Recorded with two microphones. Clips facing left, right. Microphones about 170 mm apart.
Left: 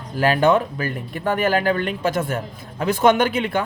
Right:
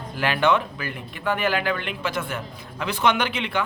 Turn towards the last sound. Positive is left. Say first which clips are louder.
# left 6 dB
turn(degrees=45)  # may be behind; listen again after turning